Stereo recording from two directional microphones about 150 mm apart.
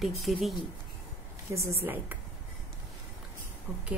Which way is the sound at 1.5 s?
15° right (ahead or behind).